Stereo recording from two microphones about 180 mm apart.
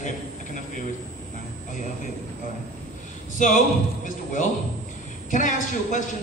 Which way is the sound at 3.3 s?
45° left (ahead or behind).